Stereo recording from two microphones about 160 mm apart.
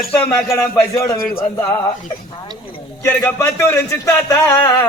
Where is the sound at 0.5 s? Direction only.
20° left (ahead or behind).